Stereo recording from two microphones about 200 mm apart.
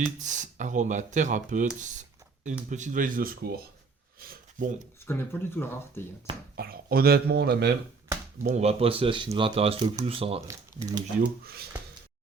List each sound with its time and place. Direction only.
0.2 s speech: 40° right (ahead or behind)
2.6 s speech: 40° right (ahead or behind)
5.0 s speech: 10° left (ahead or behind)
6.6 s speech: 50° right (ahead or behind)
8.4 s speech: 30° right (ahead or behind)
10.5 s speech: 20° right (ahead or behind)
11.2 s speech: 50° right (ahead or behind)